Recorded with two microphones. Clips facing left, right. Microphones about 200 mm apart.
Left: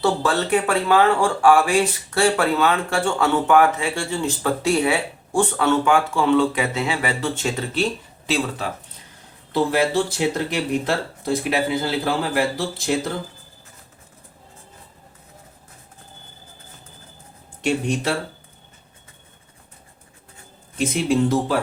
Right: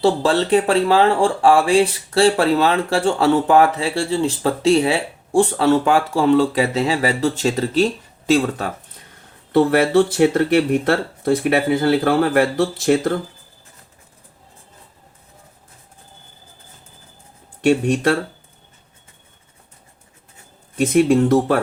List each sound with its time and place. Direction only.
0.0 s speech: 30° right (ahead or behind)
8.3 s speech: 50° right (ahead or behind)
9.5 s speech: 60° right (ahead or behind)
20.7 s speech: 60° right (ahead or behind)